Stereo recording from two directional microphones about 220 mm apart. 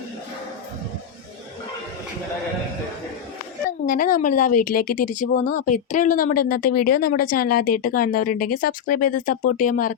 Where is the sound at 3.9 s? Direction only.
35° left (ahead or behind).